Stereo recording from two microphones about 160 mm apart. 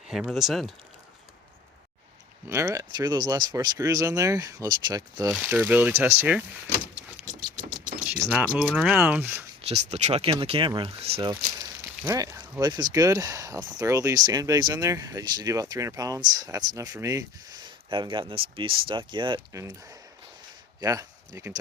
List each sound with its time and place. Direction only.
0.1 s speech: 5° right (ahead or behind)
2.5 s speech: 15° right (ahead or behind)
5.3 s speech: 10° right (ahead or behind)
7.3 s mechanisms: 55° right (ahead or behind)
8.2 s speech: 40° right (ahead or behind)
8.5 s speech: 5° right (ahead or behind)
9.6 s speech: 40° right (ahead or behind)
11.2 s speech: 25° right (ahead or behind)
20.8 s speech: 20° right (ahead or behind)